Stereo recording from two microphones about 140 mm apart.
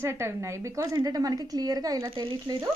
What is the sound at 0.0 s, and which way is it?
A woman's voice, 20° right (ahead or behind).